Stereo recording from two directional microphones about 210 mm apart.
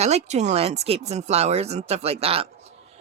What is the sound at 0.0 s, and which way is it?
Speech, 30° right (ahead or behind).